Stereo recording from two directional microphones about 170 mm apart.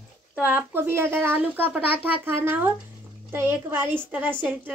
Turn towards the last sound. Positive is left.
turn(degrees=-10)  # may be behind; listen again after turning